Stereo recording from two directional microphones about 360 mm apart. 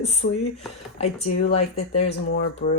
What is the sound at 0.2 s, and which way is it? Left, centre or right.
Speech, left.